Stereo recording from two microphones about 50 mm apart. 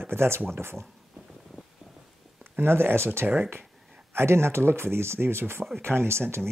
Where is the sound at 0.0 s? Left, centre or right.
Right.